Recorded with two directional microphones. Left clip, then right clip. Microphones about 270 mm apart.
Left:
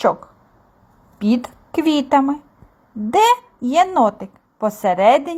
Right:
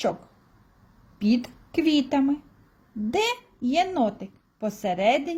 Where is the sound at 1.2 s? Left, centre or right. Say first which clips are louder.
Left 5 dB; centre.